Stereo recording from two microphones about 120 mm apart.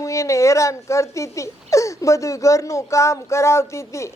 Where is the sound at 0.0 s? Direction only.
25° left (ahead or behind).